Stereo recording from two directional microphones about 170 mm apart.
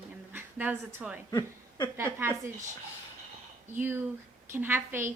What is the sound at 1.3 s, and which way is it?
Speech, 25° left (ahead or behind).